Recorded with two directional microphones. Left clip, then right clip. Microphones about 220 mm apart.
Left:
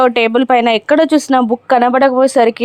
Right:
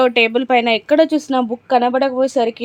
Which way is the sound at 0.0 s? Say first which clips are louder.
Left 3 dB; 15° left (ahead or behind).